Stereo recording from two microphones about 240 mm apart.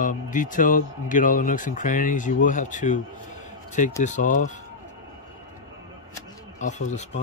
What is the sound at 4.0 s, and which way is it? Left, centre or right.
Speech, left.